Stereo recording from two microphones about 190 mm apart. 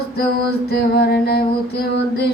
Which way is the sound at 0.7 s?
55° left (ahead or behind).